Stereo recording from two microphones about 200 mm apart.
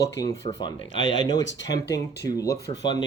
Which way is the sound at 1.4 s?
65° left (ahead or behind).